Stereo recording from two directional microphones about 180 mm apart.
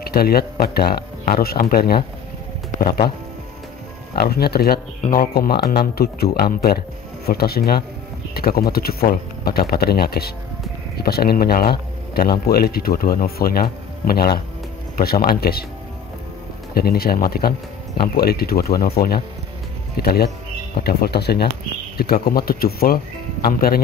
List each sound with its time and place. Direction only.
0.0 s a man's voice: 60° left (ahead or behind)
4.1 s a man's voice: 60° left (ahead or behind)
16.7 s a man's voice: 60° left (ahead or behind)